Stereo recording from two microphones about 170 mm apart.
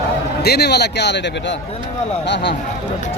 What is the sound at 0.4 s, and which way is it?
A man's voice, 70° left (ahead or behind).